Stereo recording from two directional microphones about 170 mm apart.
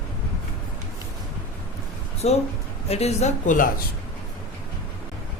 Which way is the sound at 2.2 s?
40° left (ahead or behind).